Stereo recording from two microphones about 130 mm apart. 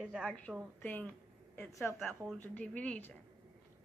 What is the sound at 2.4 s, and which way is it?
Speech, 10° left (ahead or behind).